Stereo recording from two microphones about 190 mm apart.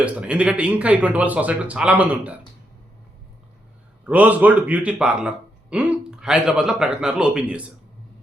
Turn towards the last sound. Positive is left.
turn(degrees=-5)  # may be behind; listen again after turning